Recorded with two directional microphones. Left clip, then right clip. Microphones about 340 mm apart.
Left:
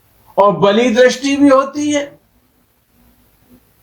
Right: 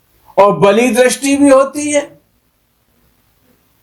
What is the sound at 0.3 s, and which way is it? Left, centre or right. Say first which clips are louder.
A man's voice: right 2 dB; centre.